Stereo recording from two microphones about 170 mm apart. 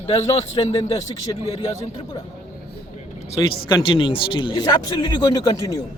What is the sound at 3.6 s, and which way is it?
A man's voice, 25° left (ahead or behind).